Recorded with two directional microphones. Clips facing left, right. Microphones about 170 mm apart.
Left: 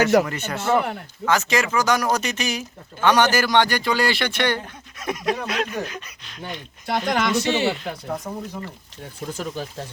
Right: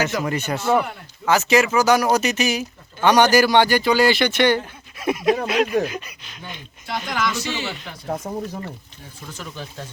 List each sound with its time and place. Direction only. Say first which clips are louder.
0.3 s speech: right 2 dB; 10° right (ahead or behind)
6.8 s speech: left 3 dB; 50° left (ahead or behind)
8.3 s speech: right 3 dB; 20° right (ahead or behind)
9.4 s speech: left 3 dB; 40° left (ahead or behind)